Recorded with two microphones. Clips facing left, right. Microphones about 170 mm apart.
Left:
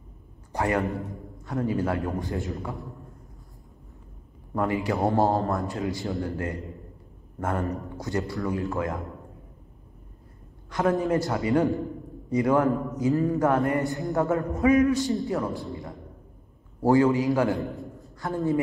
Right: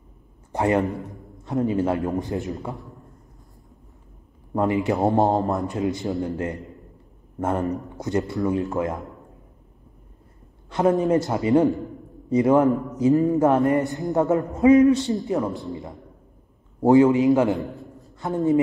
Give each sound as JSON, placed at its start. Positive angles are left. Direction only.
{"t": 0.5, "sound": "a man's voice", "side_deg": -20}
{"t": 2.7, "sound": "a man's voice", "side_deg": 0}
{"t": 4.6, "sound": "a man's voice", "side_deg": -20}
{"t": 10.7, "sound": "a man's voice", "side_deg": -20}
{"t": 16.8, "sound": "a man's voice", "side_deg": -20}
{"t": 17.6, "sound": "a sound", "side_deg": 0}
{"t": 18.2, "sound": "a man's voice", "side_deg": -20}